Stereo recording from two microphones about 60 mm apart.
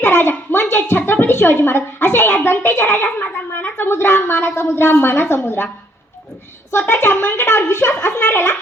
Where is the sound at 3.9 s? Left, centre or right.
Left.